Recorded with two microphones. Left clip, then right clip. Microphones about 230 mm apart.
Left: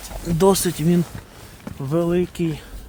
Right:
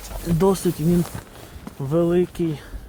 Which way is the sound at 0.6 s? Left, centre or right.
Left.